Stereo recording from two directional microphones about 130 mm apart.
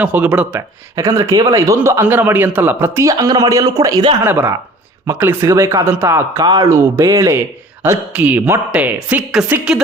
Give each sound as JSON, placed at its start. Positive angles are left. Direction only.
{"t": 0.0, "sound": "speech", "side_deg": -10}
{"t": 0.9, "sound": "a man's voice", "side_deg": -25}
{"t": 4.2, "sound": "a man's voice", "side_deg": -20}
{"t": 7.8, "sound": "speech", "side_deg": -15}